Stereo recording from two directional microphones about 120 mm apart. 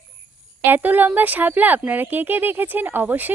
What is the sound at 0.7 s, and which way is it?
Speech, 15° right (ahead or behind).